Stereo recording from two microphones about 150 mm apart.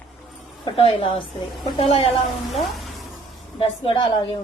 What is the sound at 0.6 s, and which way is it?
A woman's voice, 35° left (ahead or behind).